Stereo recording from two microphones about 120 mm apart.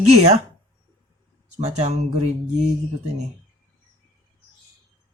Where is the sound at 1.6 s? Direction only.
65° right (ahead or behind).